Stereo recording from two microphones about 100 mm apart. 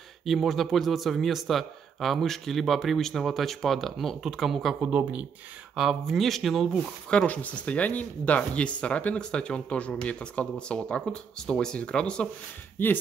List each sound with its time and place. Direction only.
0.2 s speech: centre (ahead or behind)
4.8 s speech: 15° right (ahead or behind)
5.8 s speech: 5° right (ahead or behind)
7.1 s speech: 10° left (ahead or behind)
12.7 s speech: 20° left (ahead or behind)